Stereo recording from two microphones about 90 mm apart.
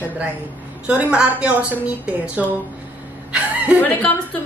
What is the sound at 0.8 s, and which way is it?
A woman's voice, 15° right (ahead or behind).